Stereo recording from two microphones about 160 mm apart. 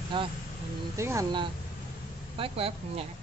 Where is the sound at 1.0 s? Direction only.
15° right (ahead or behind).